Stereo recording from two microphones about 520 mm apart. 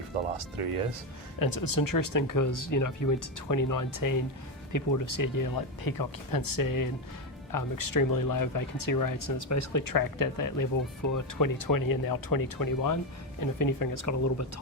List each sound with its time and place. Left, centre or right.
0.3 s speech: right
1.4 s speech: left